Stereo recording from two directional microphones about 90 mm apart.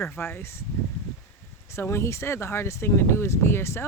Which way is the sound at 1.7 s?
30° left (ahead or behind).